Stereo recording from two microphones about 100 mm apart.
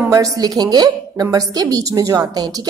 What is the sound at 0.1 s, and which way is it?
A woman's voice, 35° right (ahead or behind).